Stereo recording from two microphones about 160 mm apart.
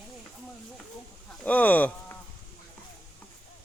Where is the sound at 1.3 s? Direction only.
10° left (ahead or behind).